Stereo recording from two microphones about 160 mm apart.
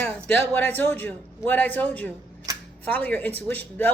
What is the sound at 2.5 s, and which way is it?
Camera, 20° right (ahead or behind).